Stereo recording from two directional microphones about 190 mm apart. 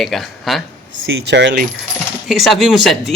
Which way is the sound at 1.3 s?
65° right (ahead or behind).